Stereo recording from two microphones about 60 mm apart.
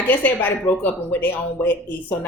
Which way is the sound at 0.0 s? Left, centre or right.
Left.